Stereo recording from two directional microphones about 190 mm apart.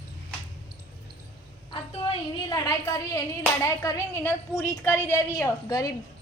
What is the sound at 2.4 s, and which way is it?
Speech, 20° left (ahead or behind).